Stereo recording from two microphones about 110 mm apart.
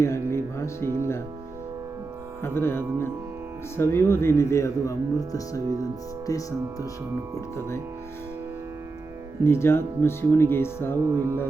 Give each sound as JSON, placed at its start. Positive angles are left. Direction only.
{"t": 0.0, "sound": "music", "side_deg": 25}
{"t": 0.9, "sound": "speech", "side_deg": 25}
{"t": 2.4, "sound": "speech", "side_deg": 20}
{"t": 9.4, "sound": "speech", "side_deg": 25}
{"t": 11.0, "sound": "music", "side_deg": -25}